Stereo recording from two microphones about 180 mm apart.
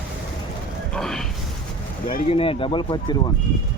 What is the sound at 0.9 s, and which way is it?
Speech, 5° left (ahead or behind).